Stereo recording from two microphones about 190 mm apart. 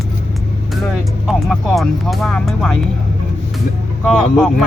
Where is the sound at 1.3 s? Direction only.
Centre (ahead or behind).